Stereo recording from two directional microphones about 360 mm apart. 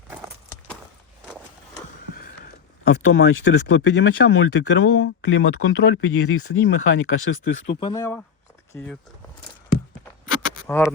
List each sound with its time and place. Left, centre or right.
2.8 s speech: left
7.8 s speech: centre
10.5 s a sound: centre